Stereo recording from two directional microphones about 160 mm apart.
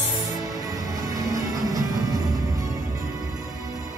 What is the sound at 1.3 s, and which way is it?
Music, 20° right (ahead or behind).